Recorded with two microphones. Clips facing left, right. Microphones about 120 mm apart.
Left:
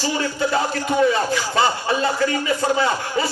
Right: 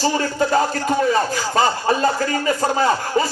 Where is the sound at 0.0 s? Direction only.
40° right (ahead or behind).